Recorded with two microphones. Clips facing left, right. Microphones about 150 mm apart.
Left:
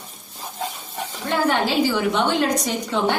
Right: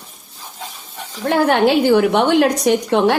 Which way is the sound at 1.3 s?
65° right (ahead or behind).